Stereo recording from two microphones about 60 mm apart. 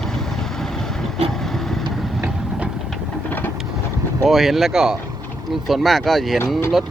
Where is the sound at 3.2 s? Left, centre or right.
Left.